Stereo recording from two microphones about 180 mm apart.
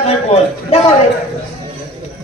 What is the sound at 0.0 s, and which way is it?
Speech, 35° left (ahead or behind).